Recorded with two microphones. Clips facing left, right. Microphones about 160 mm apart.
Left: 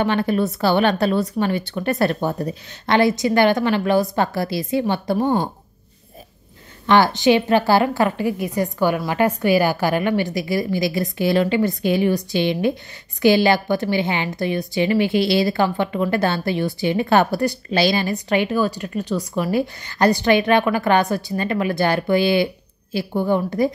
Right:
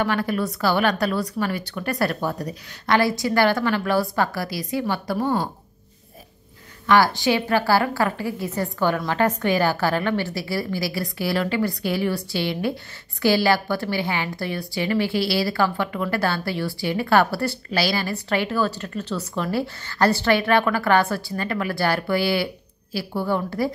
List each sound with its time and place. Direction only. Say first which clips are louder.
0.0 s a woman's voice: left 4 dB; 25° left (ahead or behind)
6.9 s a woman's voice: left 3 dB; 20° left (ahead or behind)